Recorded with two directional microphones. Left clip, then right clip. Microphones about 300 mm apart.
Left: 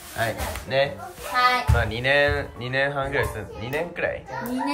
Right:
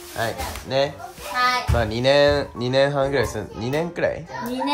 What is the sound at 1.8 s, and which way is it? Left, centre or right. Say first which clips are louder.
Speech: right 6 dB; centre.